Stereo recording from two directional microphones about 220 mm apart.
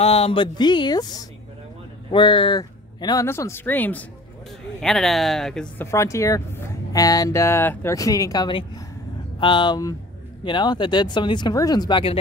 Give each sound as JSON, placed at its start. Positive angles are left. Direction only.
{"t": 0.0, "sound": "speech", "side_deg": 25}